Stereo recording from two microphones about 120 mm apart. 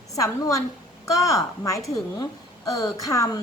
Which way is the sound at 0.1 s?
30° left (ahead or behind).